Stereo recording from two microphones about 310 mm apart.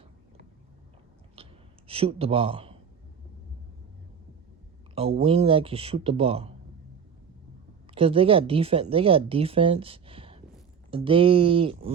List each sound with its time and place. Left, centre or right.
1.4 s clicking: centre
1.9 s speech: centre
4.9 s speech: centre
7.9 s speech: centre